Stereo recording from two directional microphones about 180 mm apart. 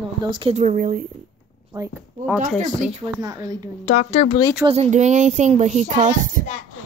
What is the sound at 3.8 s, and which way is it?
Speech, 35° left (ahead or behind).